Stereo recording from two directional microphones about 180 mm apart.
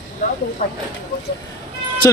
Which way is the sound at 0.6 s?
40° left (ahead or behind).